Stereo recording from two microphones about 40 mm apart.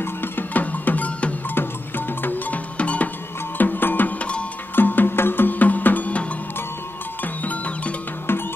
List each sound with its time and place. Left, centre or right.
0.0 s music: left
0.5 s music: left
1.5 s music: left
2.8 s music: left
3.5 s music: left
4.2 s music: left
4.7 s music: left
7.4 s music: left
8.3 s music: left